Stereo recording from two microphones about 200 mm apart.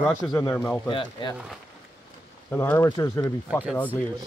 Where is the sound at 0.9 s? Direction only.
25° left (ahead or behind).